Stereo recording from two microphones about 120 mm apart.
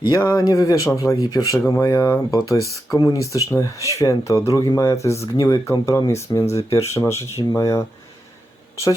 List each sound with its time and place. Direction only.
0.0 s speech: 25° left (ahead or behind)